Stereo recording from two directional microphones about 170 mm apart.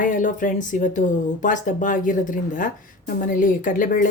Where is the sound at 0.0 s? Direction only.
50° left (ahead or behind).